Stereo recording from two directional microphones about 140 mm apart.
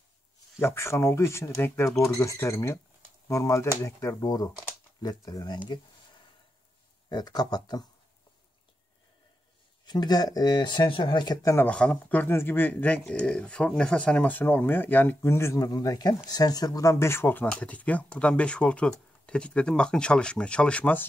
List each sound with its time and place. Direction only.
0.6 s speech: 20° left (ahead or behind)
7.1 s speech: 30° left (ahead or behind)
9.8 s speech: 30° left (ahead or behind)
11.5 s speech: 10° left (ahead or behind)